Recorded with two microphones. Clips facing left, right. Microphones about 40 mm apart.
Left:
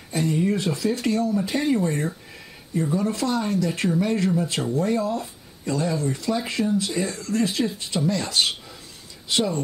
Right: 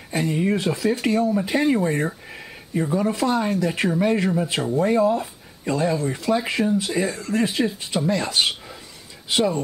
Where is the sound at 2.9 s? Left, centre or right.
Centre.